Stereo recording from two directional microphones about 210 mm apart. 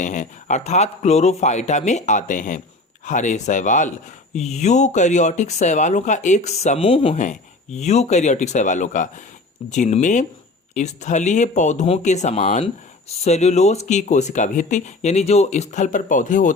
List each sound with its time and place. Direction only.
0.0 s speech: 35° left (ahead or behind)